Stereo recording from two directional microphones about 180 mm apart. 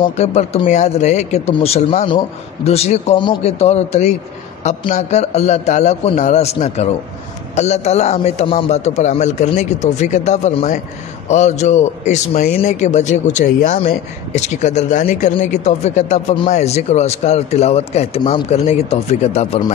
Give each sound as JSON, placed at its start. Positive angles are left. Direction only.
{"t": 0.0, "sound": "a man's voice", "side_deg": 35}